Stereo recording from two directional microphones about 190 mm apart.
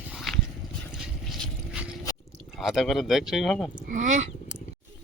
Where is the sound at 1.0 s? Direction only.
5° right (ahead or behind).